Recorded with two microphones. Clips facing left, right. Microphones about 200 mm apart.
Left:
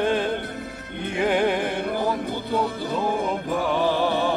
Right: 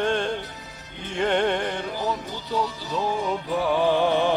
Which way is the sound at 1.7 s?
55° left (ahead or behind).